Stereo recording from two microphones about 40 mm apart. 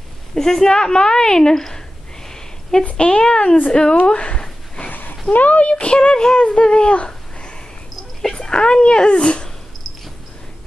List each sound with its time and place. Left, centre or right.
0.3 s a woman's voice: centre
2.2 s a sound: centre
3.0 s speech: left
3.9 s a sound: left
4.8 s a sound: left
5.3 s speech: left
5.9 s speech: centre
8.2 s dog: centre
8.5 s speech: left